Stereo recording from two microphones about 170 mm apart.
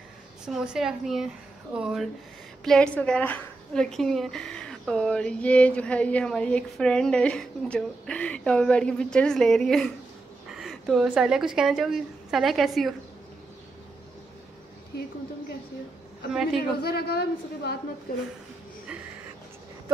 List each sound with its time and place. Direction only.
0.5 s a woman's voice: centre (ahead or behind)
14.9 s a woman's voice: 65° left (ahead or behind)
16.8 s a woman's voice: 70° left (ahead or behind)